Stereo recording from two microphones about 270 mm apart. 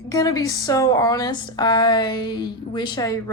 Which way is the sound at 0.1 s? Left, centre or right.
Centre.